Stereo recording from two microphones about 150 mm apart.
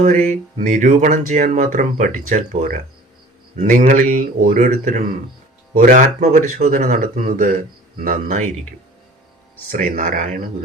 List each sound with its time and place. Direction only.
0.0 s speech: 50° right (ahead or behind)
9.7 s speech: 65° right (ahead or behind)